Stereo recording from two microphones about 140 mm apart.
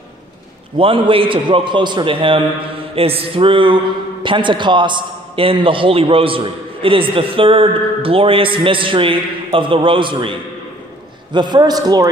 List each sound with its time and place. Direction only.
0.7 s a man's voice: 40° right (ahead or behind)
11.3 s a man's voice: 30° right (ahead or behind)